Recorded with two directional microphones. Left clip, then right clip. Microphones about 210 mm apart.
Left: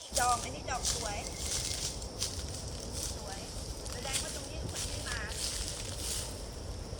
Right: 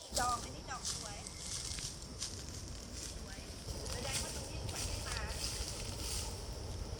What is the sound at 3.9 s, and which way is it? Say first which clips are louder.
Vehicle: left 4 dB; 20° left (ahead or behind).